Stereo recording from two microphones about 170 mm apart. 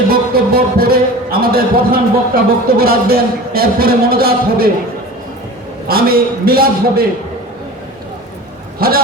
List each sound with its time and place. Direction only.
0.1 s a man's voice: 60° right (ahead or behind)
5.9 s a man's voice: 60° right (ahead or behind)
8.8 s a man's voice: 60° right (ahead or behind)